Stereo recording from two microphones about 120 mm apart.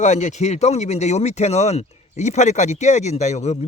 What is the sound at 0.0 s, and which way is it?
Speech, 80° left.